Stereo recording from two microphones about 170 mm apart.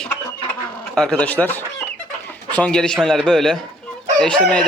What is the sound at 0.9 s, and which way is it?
Speech, 5° left (ahead or behind).